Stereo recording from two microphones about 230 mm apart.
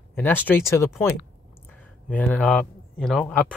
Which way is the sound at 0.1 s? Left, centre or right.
Centre.